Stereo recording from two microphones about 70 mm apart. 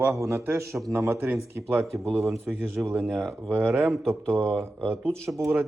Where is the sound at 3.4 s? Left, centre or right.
Right.